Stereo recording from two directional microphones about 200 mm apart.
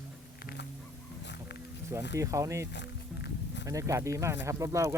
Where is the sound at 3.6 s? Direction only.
15° right (ahead or behind).